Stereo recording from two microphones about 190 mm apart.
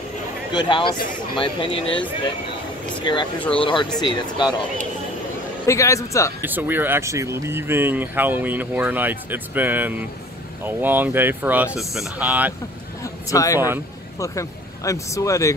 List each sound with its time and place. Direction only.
0.5 s speech: 25° left (ahead or behind)
5.7 s speech: 15° left (ahead or behind)
6.4 s speech: 10° right (ahead or behind)
13.0 s a sound: 15° left (ahead or behind)
14.2 s speech: 15° left (ahead or behind)